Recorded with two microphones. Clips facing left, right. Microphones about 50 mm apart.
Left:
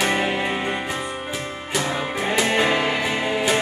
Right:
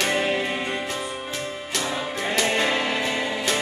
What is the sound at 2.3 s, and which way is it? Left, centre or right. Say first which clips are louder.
Music: left 3 dB; centre.